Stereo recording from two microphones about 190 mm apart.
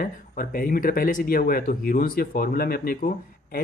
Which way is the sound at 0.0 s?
45° left (ahead or behind).